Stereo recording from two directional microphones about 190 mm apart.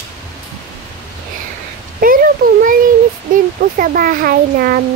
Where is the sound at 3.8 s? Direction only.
45° right (ahead or behind).